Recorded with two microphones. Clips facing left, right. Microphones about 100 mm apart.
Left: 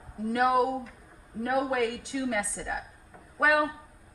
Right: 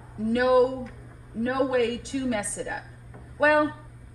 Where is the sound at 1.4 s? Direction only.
65° right (ahead or behind).